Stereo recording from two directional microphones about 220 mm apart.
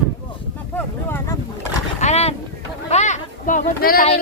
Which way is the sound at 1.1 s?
10° left (ahead or behind).